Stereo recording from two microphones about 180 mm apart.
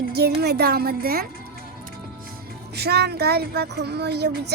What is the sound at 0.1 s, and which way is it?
Speech, 65° right (ahead or behind).